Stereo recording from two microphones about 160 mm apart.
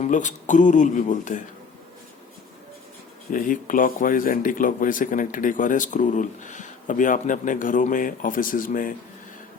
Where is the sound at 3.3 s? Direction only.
55° left (ahead or behind).